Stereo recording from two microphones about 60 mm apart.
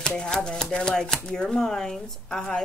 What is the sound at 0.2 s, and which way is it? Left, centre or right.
Speech, centre.